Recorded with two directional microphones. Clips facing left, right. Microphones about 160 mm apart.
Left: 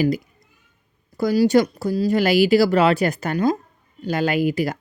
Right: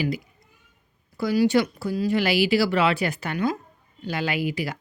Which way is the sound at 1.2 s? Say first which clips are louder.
Left 4 dB; 40° left (ahead or behind).